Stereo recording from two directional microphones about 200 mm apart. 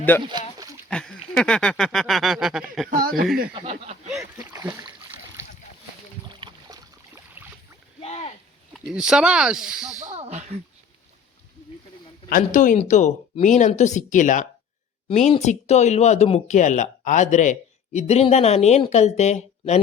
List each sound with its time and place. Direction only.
0.1 s speech: 10° left (ahead or behind)
0.9 s a sound: 5° left (ahead or behind)
2.9 s speech: 45° right (ahead or behind)
3.5 s speech: 30° right (ahead or behind)
4.2 s speech: 15° right (ahead or behind)
6.2 s boat: 25° right (ahead or behind)
8.0 s a sound: 30° left (ahead or behind)
8.7 s a sound: 5° right (ahead or behind)
10.0 s speech: 35° right (ahead or behind)
12.3 s speech: 40° left (ahead or behind)